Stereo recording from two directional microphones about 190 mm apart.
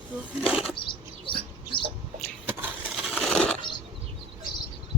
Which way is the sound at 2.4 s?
10° right (ahead or behind).